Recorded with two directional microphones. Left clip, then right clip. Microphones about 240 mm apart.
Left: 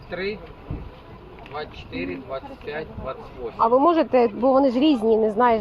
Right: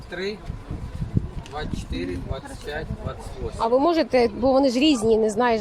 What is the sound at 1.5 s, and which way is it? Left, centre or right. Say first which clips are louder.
Speech: even; right.